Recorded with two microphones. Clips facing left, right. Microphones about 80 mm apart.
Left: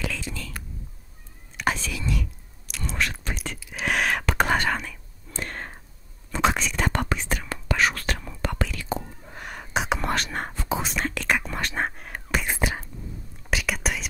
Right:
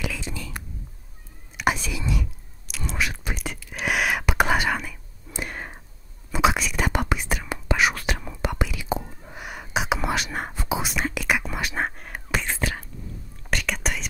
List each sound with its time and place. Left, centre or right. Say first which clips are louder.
0.2 s whispering: right 1 dB; centre
2.7 s whispering: even; centre
12.4 s whispering: left 1 dB; centre
13.4 s whispering: even; centre